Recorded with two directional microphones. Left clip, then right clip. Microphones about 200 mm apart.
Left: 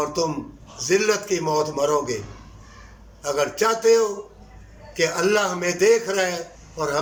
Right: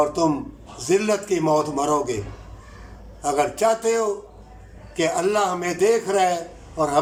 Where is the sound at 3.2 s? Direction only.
20° right (ahead or behind).